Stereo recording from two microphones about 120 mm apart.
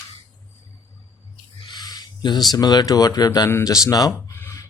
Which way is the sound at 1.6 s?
35° left (ahead or behind).